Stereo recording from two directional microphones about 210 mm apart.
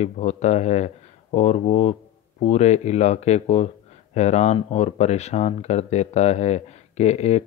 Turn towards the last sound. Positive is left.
turn(degrees=30)  # may be behind; listen again after turning